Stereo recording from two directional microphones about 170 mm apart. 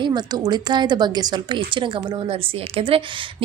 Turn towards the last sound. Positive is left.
turn(degrees=-30)  # may be behind; listen again after turning